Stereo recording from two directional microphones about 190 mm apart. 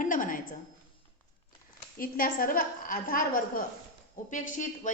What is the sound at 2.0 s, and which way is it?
A woman's voice, 50° left (ahead or behind).